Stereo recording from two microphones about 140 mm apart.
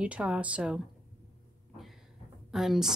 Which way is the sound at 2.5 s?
Centre (ahead or behind).